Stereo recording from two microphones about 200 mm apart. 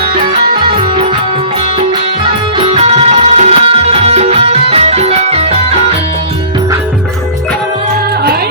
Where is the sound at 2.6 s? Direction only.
30° right (ahead or behind).